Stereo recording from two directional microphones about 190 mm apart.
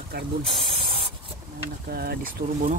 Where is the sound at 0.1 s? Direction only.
60° right (ahead or behind).